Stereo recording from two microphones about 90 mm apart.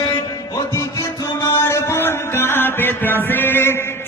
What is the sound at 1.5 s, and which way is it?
Music, 30° left (ahead or behind).